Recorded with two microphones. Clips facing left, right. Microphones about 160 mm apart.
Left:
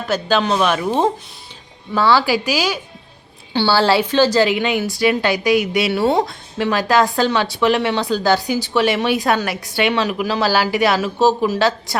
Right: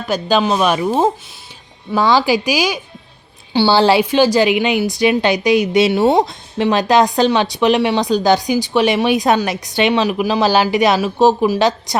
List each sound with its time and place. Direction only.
0.1 s a woman's voice: 15° right (ahead or behind)